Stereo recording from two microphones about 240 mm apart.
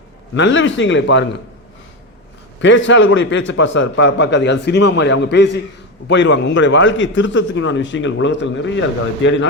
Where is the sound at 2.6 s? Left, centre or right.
Left.